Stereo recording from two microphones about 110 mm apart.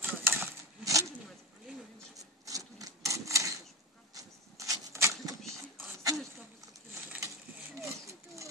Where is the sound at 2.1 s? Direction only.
30° right (ahead or behind).